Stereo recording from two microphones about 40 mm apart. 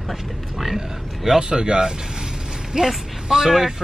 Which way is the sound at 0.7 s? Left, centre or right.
Centre.